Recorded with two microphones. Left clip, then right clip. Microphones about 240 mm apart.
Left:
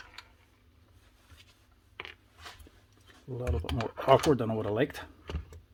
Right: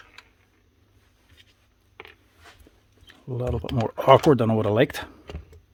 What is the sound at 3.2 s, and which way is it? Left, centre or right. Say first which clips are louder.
Speech: right 7 dB; right.